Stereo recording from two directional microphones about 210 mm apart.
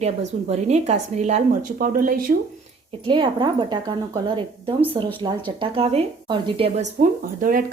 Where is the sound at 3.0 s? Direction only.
20° right (ahead or behind).